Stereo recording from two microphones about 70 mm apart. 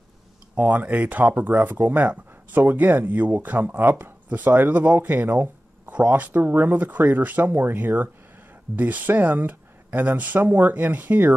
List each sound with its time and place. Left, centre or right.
0.6 s speech: right